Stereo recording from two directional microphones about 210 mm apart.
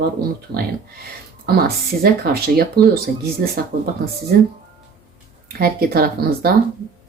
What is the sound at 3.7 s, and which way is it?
Speech, 45° right (ahead or behind).